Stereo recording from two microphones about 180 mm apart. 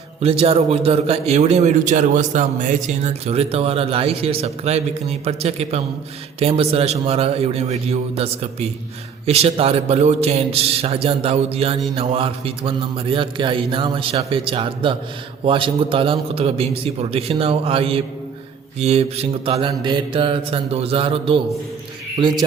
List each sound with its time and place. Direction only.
0.2 s a man's voice: 35° right (ahead or behind)